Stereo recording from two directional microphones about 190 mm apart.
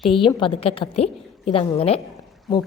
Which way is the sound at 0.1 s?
25° left (ahead or behind).